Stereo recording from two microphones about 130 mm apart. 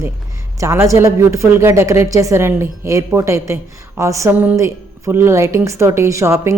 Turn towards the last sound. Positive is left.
turn(degrees=-20)  # may be behind; listen again after turning